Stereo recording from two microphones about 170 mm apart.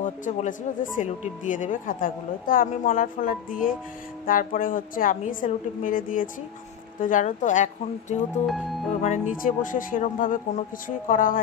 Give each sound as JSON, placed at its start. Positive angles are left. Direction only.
{"t": 0.0, "sound": "speech", "side_deg": 45}
{"t": 3.6, "sound": "music", "side_deg": 55}
{"t": 4.3, "sound": "speech", "side_deg": 55}